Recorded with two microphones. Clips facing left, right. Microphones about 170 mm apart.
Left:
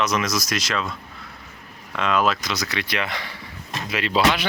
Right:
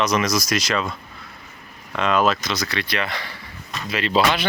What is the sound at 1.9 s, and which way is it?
Speech, centre (ahead or behind).